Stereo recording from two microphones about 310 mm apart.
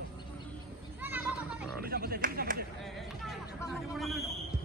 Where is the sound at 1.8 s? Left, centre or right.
Right.